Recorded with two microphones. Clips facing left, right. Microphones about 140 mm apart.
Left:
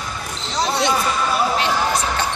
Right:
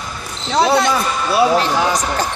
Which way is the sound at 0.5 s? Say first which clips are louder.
Right 6 dB; 60° right (ahead or behind).